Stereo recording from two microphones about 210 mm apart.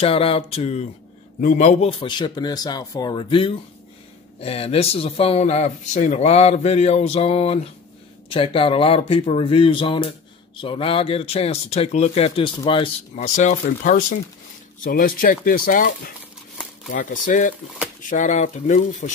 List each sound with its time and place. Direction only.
0.0 s speech: 25° left (ahead or behind)
16.9 s speech: 40° left (ahead or behind)